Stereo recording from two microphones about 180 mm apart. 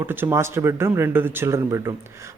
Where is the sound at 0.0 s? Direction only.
10° right (ahead or behind).